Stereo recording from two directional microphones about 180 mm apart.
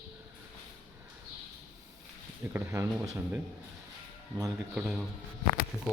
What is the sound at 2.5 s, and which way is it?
Speech, 15° right (ahead or behind).